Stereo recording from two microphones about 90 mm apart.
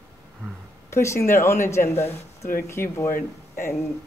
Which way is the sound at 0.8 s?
30° left (ahead or behind).